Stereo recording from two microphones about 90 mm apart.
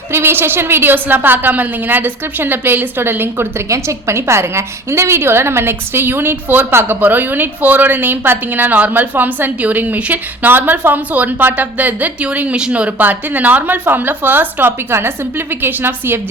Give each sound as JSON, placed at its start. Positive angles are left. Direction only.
{"t": 0.1, "sound": "a woman's voice", "side_deg": -25}